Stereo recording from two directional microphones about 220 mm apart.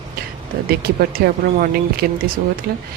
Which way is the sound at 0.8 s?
40° right (ahead or behind).